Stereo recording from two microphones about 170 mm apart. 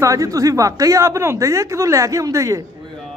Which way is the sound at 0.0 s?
20° right (ahead or behind).